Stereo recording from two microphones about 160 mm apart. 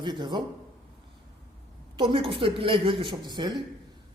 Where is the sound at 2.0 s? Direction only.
30° right (ahead or behind).